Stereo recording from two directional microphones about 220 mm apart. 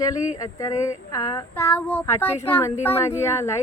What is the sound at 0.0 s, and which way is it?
Speech, 15° left (ahead or behind).